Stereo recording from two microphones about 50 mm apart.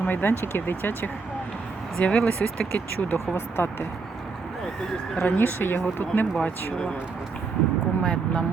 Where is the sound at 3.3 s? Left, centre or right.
Left.